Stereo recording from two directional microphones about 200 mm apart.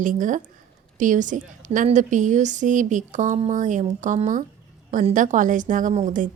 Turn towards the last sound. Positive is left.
turn(degrees=-40)  # may be behind; listen again after turning